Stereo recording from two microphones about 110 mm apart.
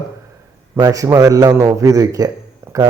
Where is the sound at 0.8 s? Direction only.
30° right (ahead or behind).